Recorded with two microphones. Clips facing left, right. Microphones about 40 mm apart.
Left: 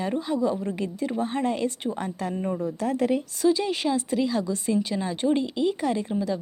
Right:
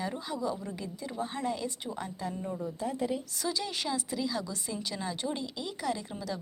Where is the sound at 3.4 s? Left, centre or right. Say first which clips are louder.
Left 13 dB; left.